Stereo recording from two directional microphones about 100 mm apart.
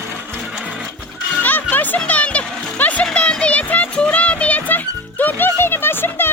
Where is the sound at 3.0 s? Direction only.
10° left (ahead or behind).